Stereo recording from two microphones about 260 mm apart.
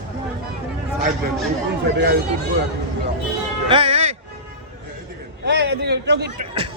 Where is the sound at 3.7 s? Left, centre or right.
Right.